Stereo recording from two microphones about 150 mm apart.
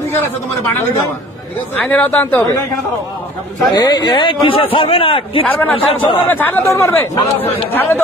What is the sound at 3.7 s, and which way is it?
Speech, 25° left (ahead or behind).